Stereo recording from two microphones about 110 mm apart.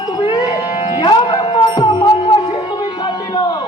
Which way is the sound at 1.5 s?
50° left (ahead or behind).